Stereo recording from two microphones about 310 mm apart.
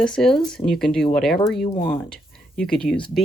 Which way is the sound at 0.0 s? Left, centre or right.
Centre.